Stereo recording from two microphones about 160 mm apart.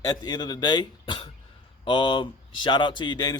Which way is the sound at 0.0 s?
25° left (ahead or behind).